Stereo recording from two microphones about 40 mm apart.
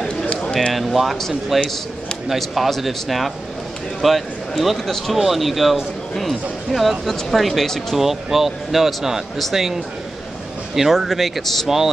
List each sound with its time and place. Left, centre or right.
0.2 s a sound: left
0.7 s speech: centre
7.9 s speech: centre